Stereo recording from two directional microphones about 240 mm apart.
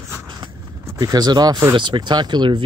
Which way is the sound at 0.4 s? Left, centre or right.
Centre.